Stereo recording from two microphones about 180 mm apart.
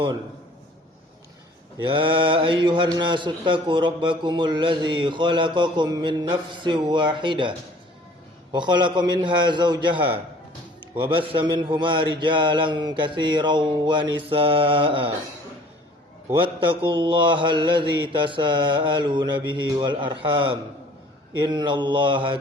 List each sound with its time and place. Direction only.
1.8 s a man's voice: 30° right (ahead or behind)
8.5 s a man's voice: 25° right (ahead or behind)
16.4 s a man's voice: 30° right (ahead or behind)